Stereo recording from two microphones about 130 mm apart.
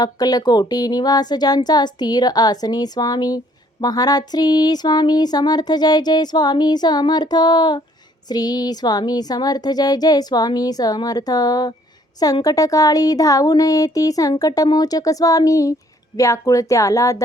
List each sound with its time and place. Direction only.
0.0 s speech: 30° left (ahead or behind)